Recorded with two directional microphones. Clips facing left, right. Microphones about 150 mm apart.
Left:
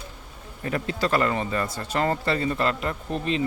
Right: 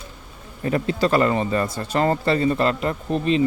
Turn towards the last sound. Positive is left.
turn(degrees=-20)  # may be behind; listen again after turning